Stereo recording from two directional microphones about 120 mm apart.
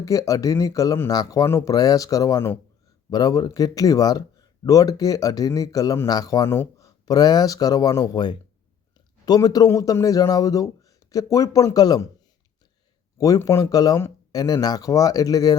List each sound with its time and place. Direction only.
0.0 s speech: 25° left (ahead or behind)
13.1 s speech: 30° left (ahead or behind)